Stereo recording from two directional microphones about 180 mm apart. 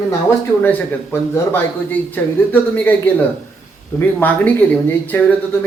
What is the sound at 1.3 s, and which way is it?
Speech, 15° left (ahead or behind).